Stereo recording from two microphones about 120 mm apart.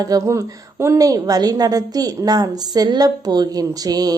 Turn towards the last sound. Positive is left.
turn(degrees=-30)  # may be behind; listen again after turning